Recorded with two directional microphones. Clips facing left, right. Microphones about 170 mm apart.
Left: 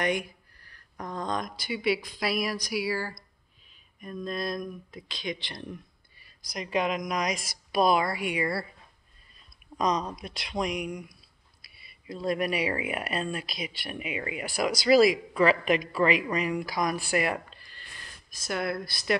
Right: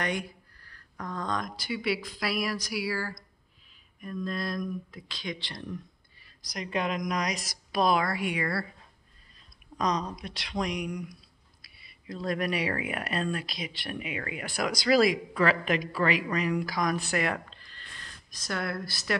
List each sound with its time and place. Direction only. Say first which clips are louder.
0.0 s speech: left 3 dB; 15° left (ahead or behind)
9.8 s speech: left 2 dB; 10° left (ahead or behind)
11.6 s a sound: left 2 dB; 40° right (ahead or behind)
12.1 s speech: left 2 dB; 5° left (ahead or behind)